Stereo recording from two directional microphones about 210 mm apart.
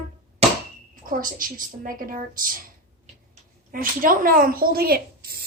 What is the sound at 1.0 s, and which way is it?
A woman's voice, 40° right (ahead or behind).